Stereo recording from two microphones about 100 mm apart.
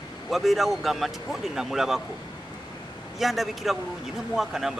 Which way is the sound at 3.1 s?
Centre (ahead or behind).